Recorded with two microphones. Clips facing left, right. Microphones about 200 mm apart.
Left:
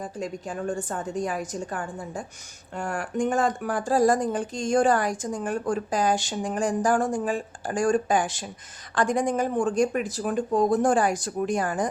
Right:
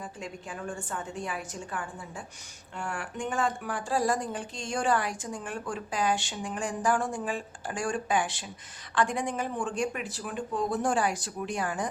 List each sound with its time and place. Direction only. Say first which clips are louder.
0.0 s a woman's voice: left 7 dB; 40° left (ahead or behind)